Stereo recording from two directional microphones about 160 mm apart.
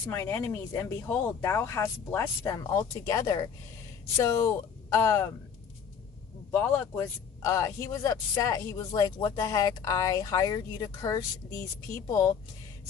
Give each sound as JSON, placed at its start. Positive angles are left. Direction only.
{"t": 0.1, "sound": "speech", "side_deg": 15}
{"t": 6.5, "sound": "a man's voice", "side_deg": 15}